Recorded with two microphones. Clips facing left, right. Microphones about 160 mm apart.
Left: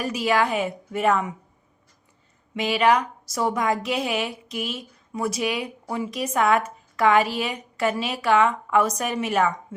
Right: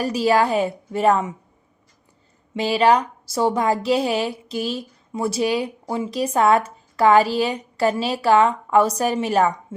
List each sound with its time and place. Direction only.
0.0 s a woman's voice: 35° right (ahead or behind)
2.6 s a woman's voice: 30° right (ahead or behind)